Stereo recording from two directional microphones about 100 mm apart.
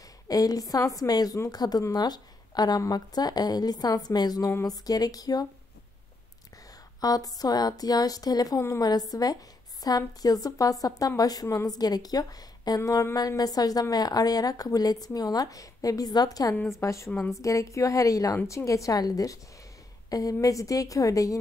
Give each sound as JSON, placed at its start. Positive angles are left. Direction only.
{"t": 0.3, "sound": "a woman's voice", "side_deg": 40}
{"t": 7.0, "sound": "a woman's voice", "side_deg": 40}
{"t": 8.5, "sound": "a woman's voice", "side_deg": 30}
{"t": 9.1, "sound": "a woman's voice", "side_deg": 40}